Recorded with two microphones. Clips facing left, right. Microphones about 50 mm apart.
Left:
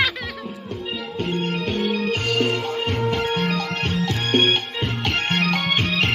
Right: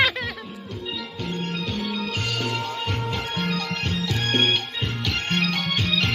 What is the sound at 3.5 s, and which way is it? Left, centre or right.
Music, left.